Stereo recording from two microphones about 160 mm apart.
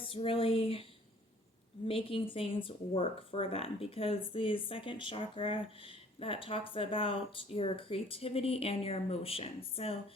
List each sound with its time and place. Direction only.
0.0 s speech: 35° left (ahead or behind)
1.9 s speech: 35° left (ahead or behind)